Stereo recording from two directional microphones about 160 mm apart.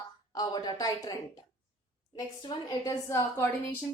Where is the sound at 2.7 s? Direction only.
20° left (ahead or behind).